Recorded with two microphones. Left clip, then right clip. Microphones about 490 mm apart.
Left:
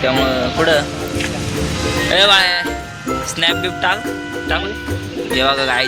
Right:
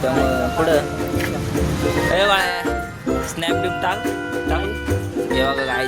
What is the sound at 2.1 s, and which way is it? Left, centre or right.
Speech, right.